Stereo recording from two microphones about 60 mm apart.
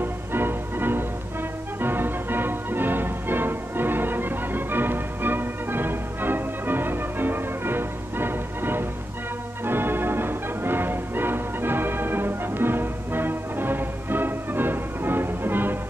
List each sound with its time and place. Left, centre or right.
0.0 s music: right